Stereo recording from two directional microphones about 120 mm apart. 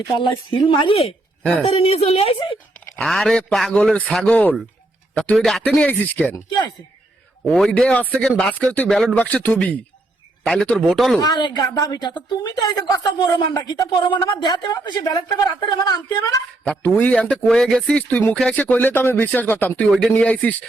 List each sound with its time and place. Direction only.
0.2 s a woman's voice: 45° left (ahead or behind)
2.9 s a man's voice: centre (ahead or behind)
6.3 s a woman's voice: 30° left (ahead or behind)
7.5 s a man's voice: 10° left (ahead or behind)
11.2 s a woman's voice: 40° left (ahead or behind)
16.6 s speech: 15° left (ahead or behind)